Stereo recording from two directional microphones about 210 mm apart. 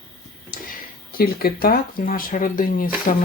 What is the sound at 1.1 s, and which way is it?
Speech, 45° left (ahead or behind).